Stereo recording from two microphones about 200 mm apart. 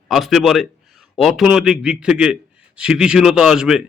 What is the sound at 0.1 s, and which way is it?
A man's voice, centre (ahead or behind).